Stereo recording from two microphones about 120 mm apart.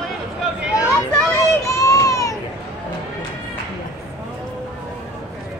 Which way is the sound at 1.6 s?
30° left (ahead or behind).